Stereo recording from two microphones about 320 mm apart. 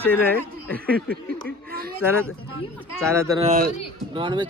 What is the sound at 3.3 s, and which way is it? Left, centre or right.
Speech, centre.